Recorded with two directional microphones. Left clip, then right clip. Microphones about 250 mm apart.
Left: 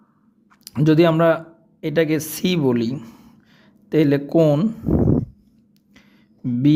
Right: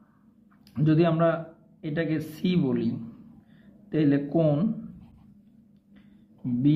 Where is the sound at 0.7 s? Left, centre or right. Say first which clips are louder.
Left 8 dB; left.